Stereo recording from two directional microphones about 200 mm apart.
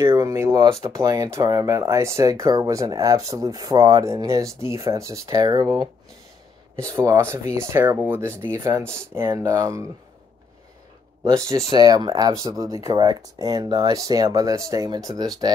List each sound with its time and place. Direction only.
0.0 s speech: 15° right (ahead or behind)
11.2 s speech: 15° right (ahead or behind)